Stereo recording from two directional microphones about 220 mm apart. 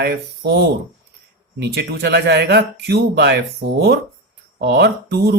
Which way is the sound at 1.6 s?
50° right (ahead or behind).